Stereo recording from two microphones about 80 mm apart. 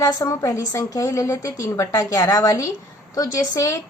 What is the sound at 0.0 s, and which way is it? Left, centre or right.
A woman's voice, left.